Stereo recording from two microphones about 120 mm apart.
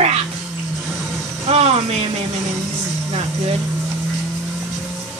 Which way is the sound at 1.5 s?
60° right (ahead or behind).